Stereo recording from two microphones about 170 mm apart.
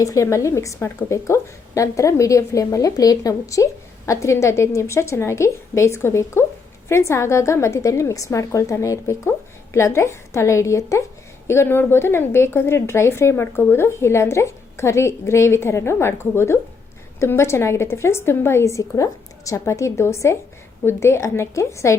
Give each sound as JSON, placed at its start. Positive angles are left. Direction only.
{"t": 0.0, "sound": "a woman's voice", "side_deg": 20}